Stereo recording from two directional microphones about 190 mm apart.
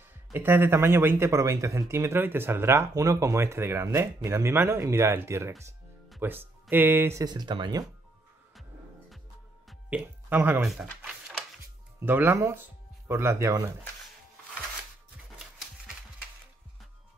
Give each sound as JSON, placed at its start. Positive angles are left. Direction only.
{"t": 0.3, "sound": "speech", "side_deg": -10}
{"t": 9.7, "sound": "speech", "side_deg": -5}